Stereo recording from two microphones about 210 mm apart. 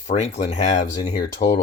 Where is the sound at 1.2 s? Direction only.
50° left (ahead or behind).